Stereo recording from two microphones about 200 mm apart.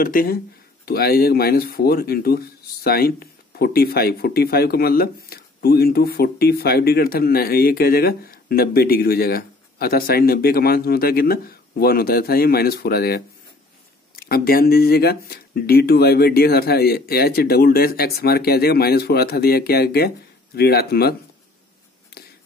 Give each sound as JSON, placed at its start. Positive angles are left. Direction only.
{"t": 0.0, "sound": "speech", "side_deg": 45}